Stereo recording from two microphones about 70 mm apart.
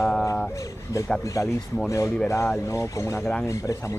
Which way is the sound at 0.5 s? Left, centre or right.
Left.